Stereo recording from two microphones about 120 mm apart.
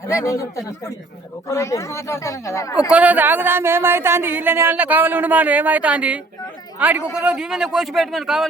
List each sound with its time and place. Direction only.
0.1 s speech: 25° left (ahead or behind)
2.9 s speech: 10° right (ahead or behind)